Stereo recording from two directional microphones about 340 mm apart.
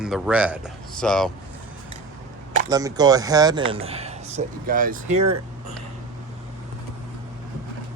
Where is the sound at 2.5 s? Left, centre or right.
Centre.